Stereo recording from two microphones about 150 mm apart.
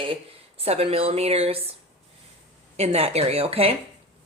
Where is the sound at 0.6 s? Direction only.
45° right (ahead or behind).